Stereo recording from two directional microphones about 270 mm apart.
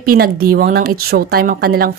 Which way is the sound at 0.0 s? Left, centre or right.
Right.